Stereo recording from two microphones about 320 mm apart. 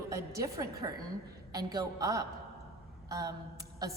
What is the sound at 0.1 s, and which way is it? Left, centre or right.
A woman's voice, centre.